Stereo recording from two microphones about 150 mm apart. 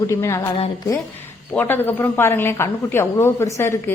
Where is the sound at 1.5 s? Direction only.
15° left (ahead or behind).